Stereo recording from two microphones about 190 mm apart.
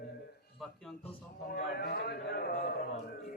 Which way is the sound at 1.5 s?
60° left (ahead or behind).